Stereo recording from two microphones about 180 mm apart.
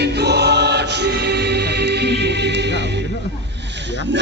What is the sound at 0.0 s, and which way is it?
Music, 65° right (ahead or behind).